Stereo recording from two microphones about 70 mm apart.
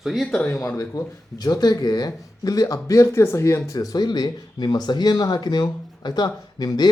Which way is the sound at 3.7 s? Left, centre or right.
Left.